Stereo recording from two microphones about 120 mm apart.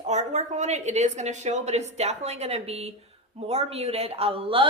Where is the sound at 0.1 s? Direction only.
70° right (ahead or behind).